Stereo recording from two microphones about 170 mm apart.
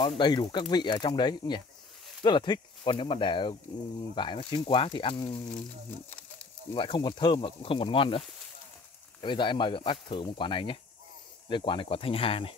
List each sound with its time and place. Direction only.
0.2 s speech: 25° left (ahead or behind)
6.7 s speech: 30° left (ahead or behind)
9.2 s speech: 30° left (ahead or behind)